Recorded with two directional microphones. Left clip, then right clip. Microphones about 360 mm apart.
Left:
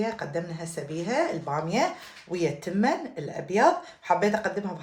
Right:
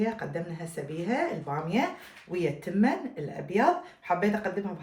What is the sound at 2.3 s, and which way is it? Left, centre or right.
Speech, left.